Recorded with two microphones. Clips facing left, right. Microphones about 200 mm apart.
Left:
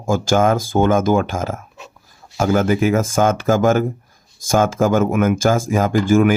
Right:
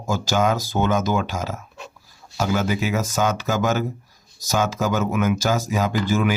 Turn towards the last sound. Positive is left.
turn(degrees=50)  # may be behind; listen again after turning